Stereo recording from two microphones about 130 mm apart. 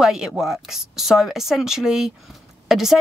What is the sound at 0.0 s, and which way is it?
Speech, 5° right (ahead or behind).